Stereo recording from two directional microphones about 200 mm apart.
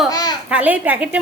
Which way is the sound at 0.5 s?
10° right (ahead or behind).